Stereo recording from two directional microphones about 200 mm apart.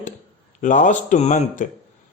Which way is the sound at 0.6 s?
40° left (ahead or behind).